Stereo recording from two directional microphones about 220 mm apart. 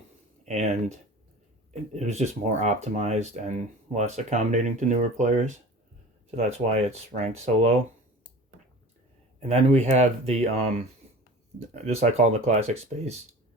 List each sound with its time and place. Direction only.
0.4 s speech: 30° right (ahead or behind)
9.5 s speech: 30° right (ahead or behind)